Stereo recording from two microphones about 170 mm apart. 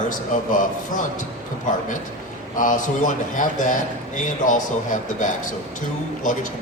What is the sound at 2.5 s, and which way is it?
Speech, 50° left (ahead or behind).